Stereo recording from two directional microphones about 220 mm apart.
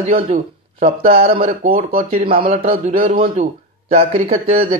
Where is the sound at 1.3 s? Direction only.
25° right (ahead or behind).